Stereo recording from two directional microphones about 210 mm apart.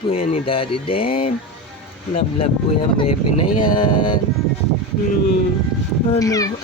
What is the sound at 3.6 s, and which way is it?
Speech, 20° left (ahead or behind).